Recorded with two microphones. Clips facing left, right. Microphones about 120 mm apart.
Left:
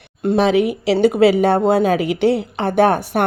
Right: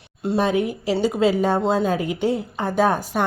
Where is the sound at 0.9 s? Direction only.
60° left (ahead or behind).